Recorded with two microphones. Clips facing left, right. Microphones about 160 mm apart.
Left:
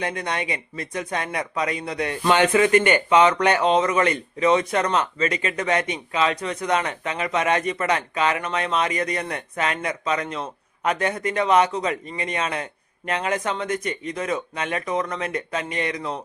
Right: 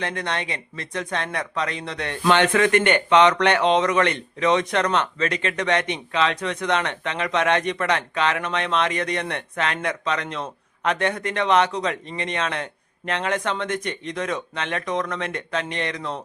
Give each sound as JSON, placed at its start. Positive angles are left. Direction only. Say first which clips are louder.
{"t": 0.0, "sound": "speech", "louder": "left 1 dB", "side_deg": 10}